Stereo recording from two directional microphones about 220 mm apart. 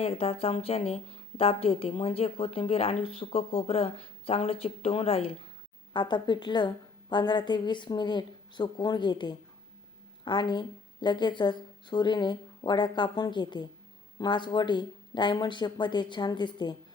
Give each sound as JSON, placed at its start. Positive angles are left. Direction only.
{"t": 0.0, "sound": "a woman's voice", "side_deg": 25}